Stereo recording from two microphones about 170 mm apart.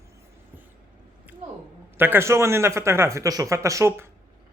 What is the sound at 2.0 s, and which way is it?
A man's voice, 15° right (ahead or behind).